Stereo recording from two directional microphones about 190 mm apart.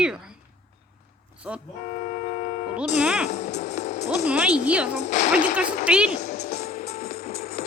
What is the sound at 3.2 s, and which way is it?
Music, 35° left (ahead or behind).